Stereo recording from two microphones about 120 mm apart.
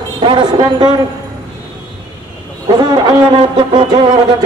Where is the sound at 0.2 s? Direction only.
40° right (ahead or behind).